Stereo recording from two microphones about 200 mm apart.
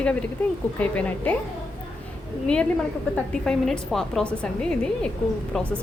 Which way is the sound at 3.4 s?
Centre (ahead or behind).